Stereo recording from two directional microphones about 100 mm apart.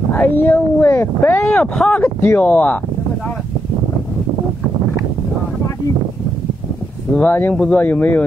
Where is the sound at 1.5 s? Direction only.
10° left (ahead or behind).